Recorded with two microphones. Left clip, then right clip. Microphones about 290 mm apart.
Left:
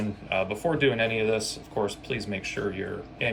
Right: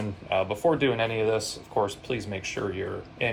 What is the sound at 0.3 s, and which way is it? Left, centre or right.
Speech, centre.